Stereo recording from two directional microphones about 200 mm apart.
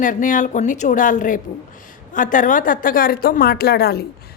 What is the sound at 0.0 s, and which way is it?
A woman's voice, 40° left (ahead or behind).